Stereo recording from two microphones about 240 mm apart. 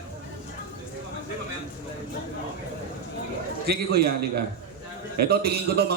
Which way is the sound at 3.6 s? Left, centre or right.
Right.